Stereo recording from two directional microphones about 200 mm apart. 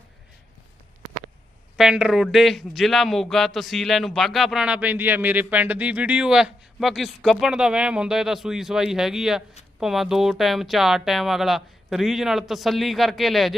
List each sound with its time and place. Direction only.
1.7 s a man's voice: 5° right (ahead or behind)